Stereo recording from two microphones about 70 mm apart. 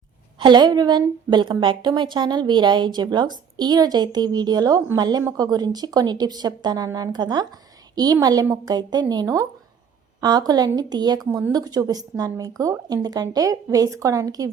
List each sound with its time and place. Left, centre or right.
0.4 s a woman's voice: right
7.9 s a woman's voice: right
8.6 s speech: right
9.2 s speech: right
10.2 s a woman's voice: right